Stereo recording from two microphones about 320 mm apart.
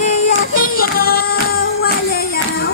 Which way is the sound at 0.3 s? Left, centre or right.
Left.